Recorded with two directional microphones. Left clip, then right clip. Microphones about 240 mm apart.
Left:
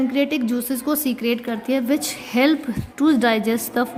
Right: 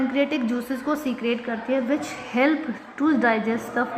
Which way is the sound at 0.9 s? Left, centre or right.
Left.